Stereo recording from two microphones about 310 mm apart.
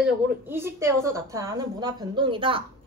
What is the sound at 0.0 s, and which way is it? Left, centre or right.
A woman's voice, centre.